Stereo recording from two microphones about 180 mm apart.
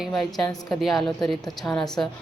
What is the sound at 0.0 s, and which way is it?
Speech, centre (ahead or behind).